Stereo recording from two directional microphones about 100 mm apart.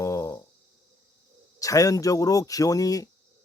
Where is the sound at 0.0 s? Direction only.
30° left (ahead or behind).